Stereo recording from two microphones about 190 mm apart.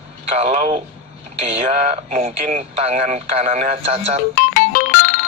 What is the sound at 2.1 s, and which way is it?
Speech, 45° right (ahead or behind).